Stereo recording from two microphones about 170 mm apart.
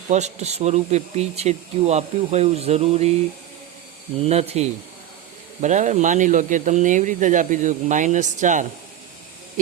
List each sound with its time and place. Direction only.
0.1 s speech: 40° right (ahead or behind)
4.2 s speech: 40° right (ahead or behind)